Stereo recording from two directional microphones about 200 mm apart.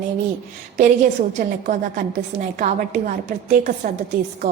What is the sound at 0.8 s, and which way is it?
A woman's voice, 40° right (ahead or behind).